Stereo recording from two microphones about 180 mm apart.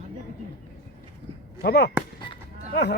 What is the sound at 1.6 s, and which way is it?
Speech, 60° left (ahead or behind).